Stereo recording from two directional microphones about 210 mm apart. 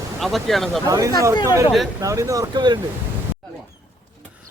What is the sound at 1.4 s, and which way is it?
Speech, 15° right (ahead or behind).